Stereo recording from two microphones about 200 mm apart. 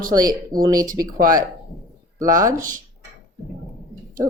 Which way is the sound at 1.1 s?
45° right (ahead or behind).